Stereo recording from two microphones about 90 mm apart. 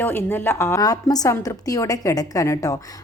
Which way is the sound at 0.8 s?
45° left (ahead or behind).